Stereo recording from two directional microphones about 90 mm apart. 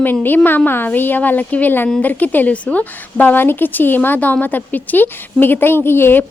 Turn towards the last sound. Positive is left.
turn(degrees=25)  # may be behind; listen again after turning